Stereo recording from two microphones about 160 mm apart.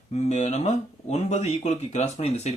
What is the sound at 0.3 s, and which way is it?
Speech, 45° left (ahead or behind).